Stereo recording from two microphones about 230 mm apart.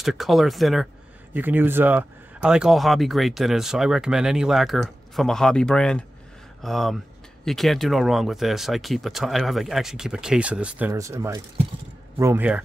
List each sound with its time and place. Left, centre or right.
0.0 s speech: centre